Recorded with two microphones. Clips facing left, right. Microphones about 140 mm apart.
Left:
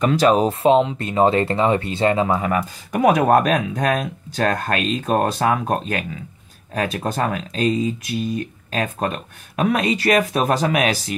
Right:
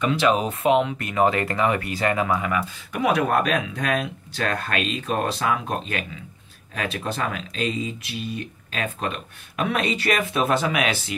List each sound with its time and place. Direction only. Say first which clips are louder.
0.0 s speech: left 5 dB; 40° left (ahead or behind)